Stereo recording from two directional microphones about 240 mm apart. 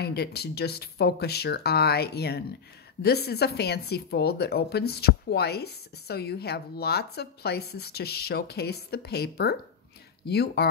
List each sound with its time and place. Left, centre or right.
0.0 s a woman's voice: left